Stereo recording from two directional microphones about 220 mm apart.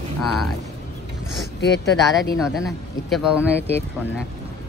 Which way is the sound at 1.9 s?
Centre (ahead or behind).